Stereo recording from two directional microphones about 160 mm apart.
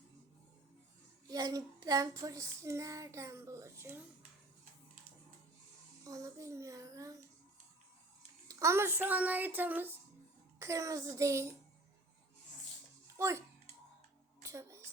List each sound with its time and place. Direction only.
1.3 s child singing: 25° right (ahead or behind)
6.1 s child singing: 20° right (ahead or behind)
8.4 s a child's voice: 20° right (ahead or behind)
10.6 s child singing: 20° right (ahead or behind)
13.1 s a child's voice: 15° right (ahead or behind)
14.4 s a sound: 15° right (ahead or behind)